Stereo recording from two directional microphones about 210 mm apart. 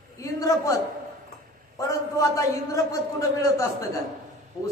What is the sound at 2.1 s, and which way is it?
A man's voice, 15° left (ahead or behind).